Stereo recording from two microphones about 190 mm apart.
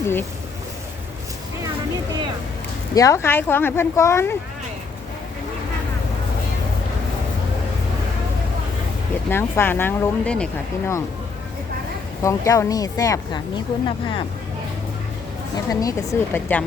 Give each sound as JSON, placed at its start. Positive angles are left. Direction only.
{"t": 0.0, "sound": "speech", "side_deg": 10}
{"t": 2.9, "sound": "speech", "side_deg": 15}
{"t": 9.3, "sound": "speech", "side_deg": 10}
{"t": 12.2, "sound": "speech", "side_deg": 15}
{"t": 15.5, "sound": "speech", "side_deg": 20}